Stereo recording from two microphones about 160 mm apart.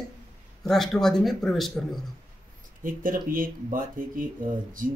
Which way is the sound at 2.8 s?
60° right (ahead or behind).